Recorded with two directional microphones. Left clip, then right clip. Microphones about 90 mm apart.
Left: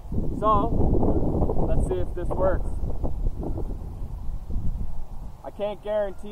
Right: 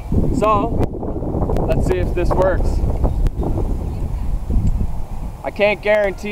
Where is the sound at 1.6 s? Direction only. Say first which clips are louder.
Right 9 dB; 40° right (ahead or behind).